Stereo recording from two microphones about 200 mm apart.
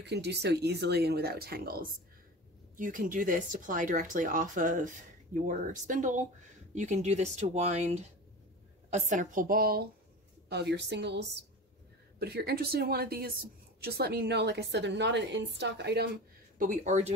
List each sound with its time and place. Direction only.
0.0 s a woman's voice: 55° right (ahead or behind)
16.5 s speech: 40° right (ahead or behind)